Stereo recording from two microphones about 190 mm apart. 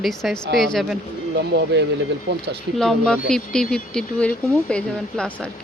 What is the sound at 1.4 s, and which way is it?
Speech, 65° right (ahead or behind).